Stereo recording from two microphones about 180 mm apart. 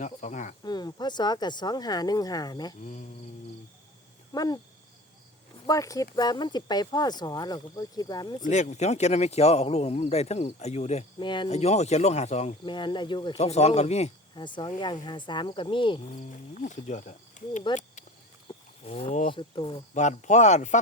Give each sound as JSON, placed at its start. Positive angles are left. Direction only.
{"t": 0.0, "sound": "speech", "side_deg": 45}
{"t": 0.6, "sound": "speech", "side_deg": 25}
{"t": 4.3, "sound": "a sound", "side_deg": 20}
{"t": 5.6, "sound": "speech", "side_deg": 20}
{"t": 8.4, "sound": "speech", "side_deg": 40}
{"t": 11.2, "sound": "speech", "side_deg": 25}
{"t": 11.5, "sound": "speech", "side_deg": 40}
{"t": 12.6, "sound": "speech", "side_deg": 25}
{"t": 14.3, "sound": "speech", "side_deg": 25}
{"t": 16.6, "sound": "speech", "side_deg": 40}
{"t": 18.4, "sound": "cattle", "side_deg": 35}
{"t": 19.3, "sound": "speech", "side_deg": 25}
{"t": 19.9, "sound": "speech", "side_deg": 40}